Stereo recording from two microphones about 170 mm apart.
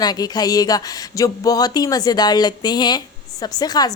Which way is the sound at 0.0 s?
25° left (ahead or behind).